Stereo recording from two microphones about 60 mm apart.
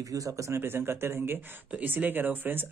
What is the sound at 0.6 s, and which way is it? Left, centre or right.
Speech, right.